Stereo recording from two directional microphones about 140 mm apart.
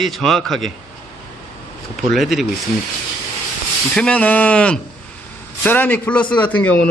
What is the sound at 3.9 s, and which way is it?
A man's voice, 10° left (ahead or behind).